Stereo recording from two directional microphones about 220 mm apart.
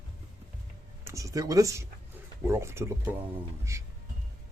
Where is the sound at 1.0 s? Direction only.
15° right (ahead or behind).